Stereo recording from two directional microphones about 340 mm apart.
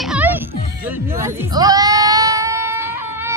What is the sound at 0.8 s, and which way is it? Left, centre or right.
Baby cry, centre.